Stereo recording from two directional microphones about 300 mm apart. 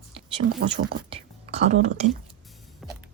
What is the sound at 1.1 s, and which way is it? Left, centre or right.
Whispering, right.